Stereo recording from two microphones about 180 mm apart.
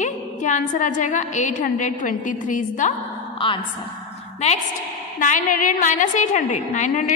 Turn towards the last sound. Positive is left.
turn(degrees=45)  # may be behind; listen again after turning